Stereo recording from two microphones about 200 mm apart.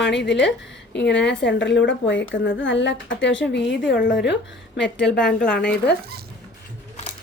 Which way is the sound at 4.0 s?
45° left (ahead or behind).